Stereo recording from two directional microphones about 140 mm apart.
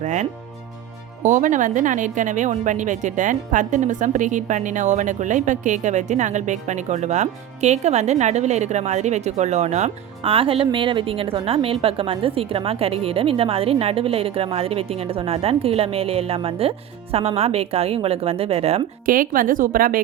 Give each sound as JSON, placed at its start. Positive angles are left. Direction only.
{"t": 0.0, "sound": "a woman's voice", "side_deg": -60}
{"t": 19.0, "sound": "a woman's voice", "side_deg": -85}